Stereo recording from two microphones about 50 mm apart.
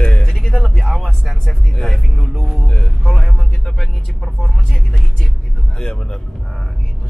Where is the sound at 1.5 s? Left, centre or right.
Centre.